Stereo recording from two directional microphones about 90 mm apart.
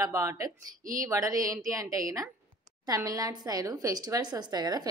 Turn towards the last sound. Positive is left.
turn(degrees=-50)  # may be behind; listen again after turning